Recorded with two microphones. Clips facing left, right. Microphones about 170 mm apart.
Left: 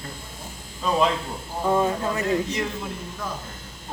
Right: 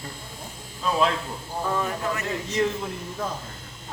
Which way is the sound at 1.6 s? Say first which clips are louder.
Left 5 dB; 25° left (ahead or behind).